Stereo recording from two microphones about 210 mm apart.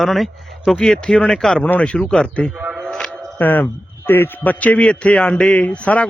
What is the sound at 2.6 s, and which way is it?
Music, centre (ahead or behind).